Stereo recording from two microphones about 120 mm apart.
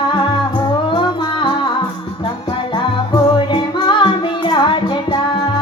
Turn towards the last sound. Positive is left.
turn(degrees=40)  # may be behind; listen again after turning